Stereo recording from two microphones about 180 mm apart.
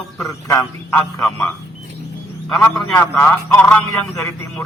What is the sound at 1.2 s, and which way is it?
A man's voice, 5° left (ahead or behind).